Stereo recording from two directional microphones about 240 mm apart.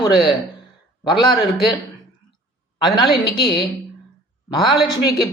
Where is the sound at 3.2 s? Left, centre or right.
Centre.